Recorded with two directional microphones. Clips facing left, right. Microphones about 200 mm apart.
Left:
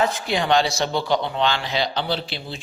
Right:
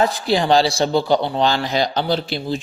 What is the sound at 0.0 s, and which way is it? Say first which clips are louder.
A man's voice: right 4 dB; 35° right (ahead or behind).